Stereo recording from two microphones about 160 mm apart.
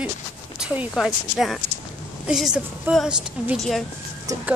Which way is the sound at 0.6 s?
5° right (ahead or behind).